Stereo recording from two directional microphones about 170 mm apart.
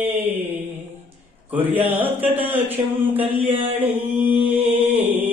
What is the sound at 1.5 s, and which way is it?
Mantra, 10° right (ahead or behind).